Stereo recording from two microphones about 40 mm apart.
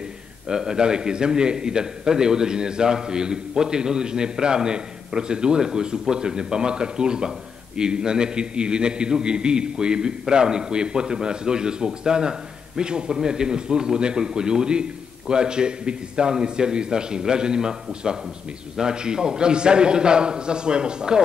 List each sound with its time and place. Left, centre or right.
0.5 s a man's voice: centre